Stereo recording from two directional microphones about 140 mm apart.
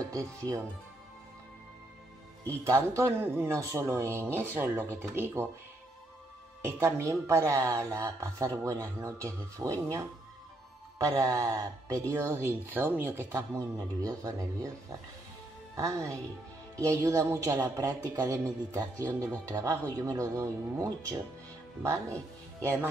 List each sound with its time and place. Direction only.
0.1 s a woman's voice: 25° right (ahead or behind)
2.4 s speech: 20° right (ahead or behind)
6.6 s a woman's voice: 20° right (ahead or behind)
13.3 s a woman's voice: 25° right (ahead or behind)
15.7 s a woman's voice: 25° right (ahead or behind)